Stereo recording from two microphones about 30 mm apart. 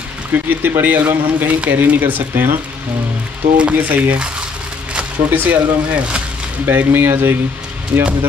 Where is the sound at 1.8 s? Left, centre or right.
Right.